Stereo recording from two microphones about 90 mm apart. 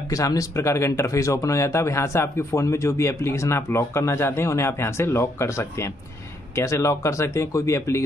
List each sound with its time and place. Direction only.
0.1 s speech: 40° left (ahead or behind)